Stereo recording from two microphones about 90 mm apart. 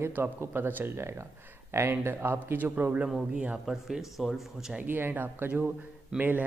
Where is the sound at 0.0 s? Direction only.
30° right (ahead or behind).